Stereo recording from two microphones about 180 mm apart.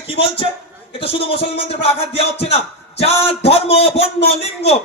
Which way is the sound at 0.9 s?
30° left (ahead or behind).